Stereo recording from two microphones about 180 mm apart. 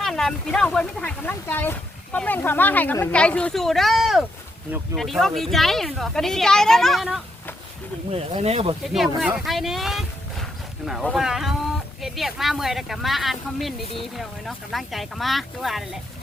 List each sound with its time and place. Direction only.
0.0 s speech: centre (ahead or behind)
8.1 s speech: 35° right (ahead or behind)
9.2 s speech: 5° right (ahead or behind)